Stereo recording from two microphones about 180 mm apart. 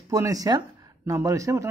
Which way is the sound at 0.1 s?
20° right (ahead or behind).